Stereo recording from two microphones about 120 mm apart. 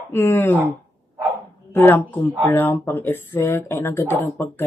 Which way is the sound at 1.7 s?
15° left (ahead or behind).